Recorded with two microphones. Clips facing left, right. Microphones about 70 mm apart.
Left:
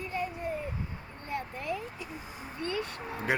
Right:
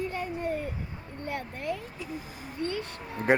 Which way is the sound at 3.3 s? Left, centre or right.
Right.